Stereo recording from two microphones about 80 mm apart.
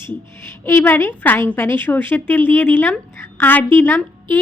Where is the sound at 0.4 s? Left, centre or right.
Left.